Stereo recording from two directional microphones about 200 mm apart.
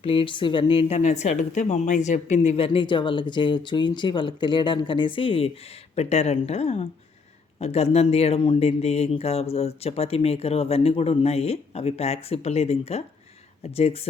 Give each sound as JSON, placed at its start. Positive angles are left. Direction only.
{"t": 0.0, "sound": "speech", "side_deg": 25}